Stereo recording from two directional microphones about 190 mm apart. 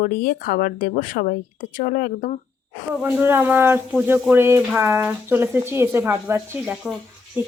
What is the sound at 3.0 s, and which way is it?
Speech, 10° right (ahead or behind).